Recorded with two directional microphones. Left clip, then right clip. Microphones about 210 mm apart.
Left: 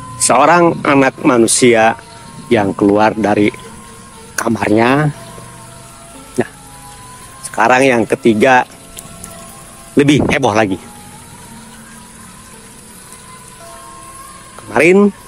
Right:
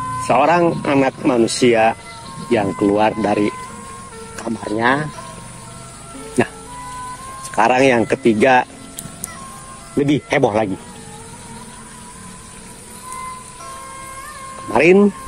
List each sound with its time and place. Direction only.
0.3 s speech: 15° left (ahead or behind)
4.5 s speech: 30° left (ahead or behind)
7.5 s speech: 10° left (ahead or behind)
9.9 s speech: 30° left (ahead or behind)
14.7 s speech: 15° left (ahead or behind)